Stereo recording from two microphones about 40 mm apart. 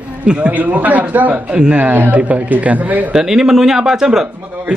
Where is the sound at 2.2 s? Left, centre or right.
Right.